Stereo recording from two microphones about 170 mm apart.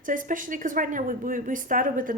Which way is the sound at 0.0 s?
50° right (ahead or behind).